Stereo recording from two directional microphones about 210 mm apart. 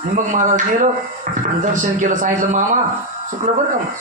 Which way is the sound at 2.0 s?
40° right (ahead or behind).